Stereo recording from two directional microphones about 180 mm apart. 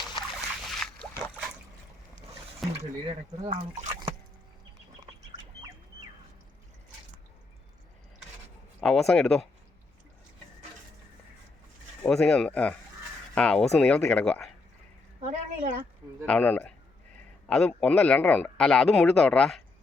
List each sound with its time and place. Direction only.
0.7 s boat: 5° left (ahead or behind)
2.6 s speech: centre (ahead or behind)
3.4 s speech: 40° right (ahead or behind)
8.8 s speech: centre (ahead or behind)
12.0 s speech: 5° left (ahead or behind)
15.2 s a woman's voice: 35° right (ahead or behind)
16.2 s speech: 10° left (ahead or behind)